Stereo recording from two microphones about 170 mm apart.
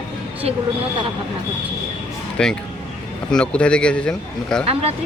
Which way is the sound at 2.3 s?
5° left (ahead or behind).